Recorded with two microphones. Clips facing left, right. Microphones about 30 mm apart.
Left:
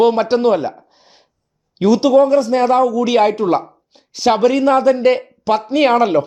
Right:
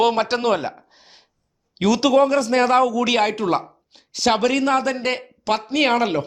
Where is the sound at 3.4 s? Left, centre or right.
Right.